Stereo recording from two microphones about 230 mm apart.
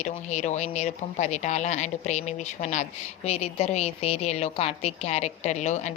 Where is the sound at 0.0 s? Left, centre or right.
Left.